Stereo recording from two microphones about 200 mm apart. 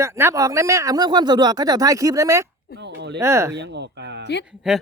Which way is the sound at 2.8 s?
60° right (ahead or behind).